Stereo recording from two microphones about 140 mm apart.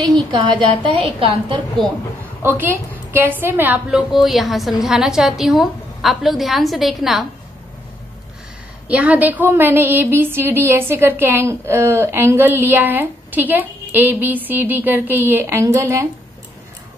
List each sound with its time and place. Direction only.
0.3 s speech: 35° right (ahead or behind)
2.4 s a woman's voice: 15° right (ahead or behind)
4.1 s a woman's voice: centre (ahead or behind)
8.8 s a woman's voice: 10° right (ahead or behind)